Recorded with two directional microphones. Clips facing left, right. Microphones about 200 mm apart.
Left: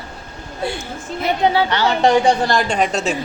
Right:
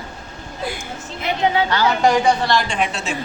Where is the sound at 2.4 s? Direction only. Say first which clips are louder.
Left 2 dB; 40° left (ahead or behind).